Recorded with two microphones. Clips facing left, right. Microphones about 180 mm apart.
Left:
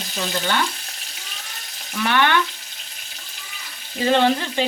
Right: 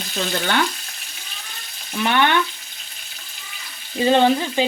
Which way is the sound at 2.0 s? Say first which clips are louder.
Right 1 dB; 20° right (ahead or behind).